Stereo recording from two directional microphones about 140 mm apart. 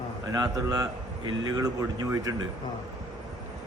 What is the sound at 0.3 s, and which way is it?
A man's voice, 30° right (ahead or behind).